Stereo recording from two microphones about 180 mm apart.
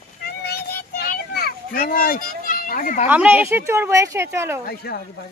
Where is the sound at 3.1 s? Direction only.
10° right (ahead or behind).